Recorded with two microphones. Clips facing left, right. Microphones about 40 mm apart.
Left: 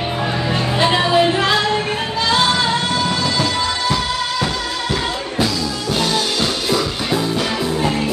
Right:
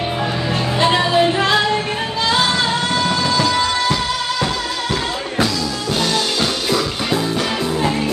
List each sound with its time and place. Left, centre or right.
0.7 s music: centre